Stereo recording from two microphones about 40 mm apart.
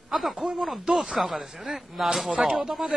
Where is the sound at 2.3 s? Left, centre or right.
Centre.